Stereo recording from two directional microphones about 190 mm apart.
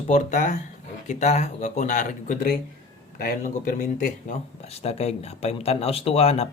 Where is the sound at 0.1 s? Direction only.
40° left (ahead or behind).